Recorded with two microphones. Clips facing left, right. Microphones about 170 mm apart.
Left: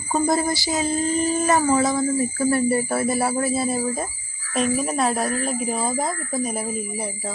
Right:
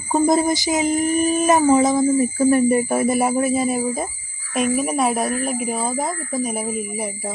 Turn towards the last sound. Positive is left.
turn(degrees=-15)  # may be behind; listen again after turning